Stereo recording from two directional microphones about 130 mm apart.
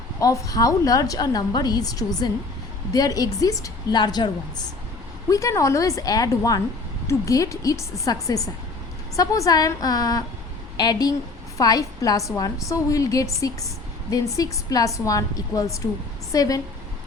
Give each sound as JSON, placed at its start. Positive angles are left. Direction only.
{"t": 0.2, "sound": "a woman's voice", "side_deg": 25}